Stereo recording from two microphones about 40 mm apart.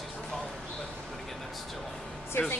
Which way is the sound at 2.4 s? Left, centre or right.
Left.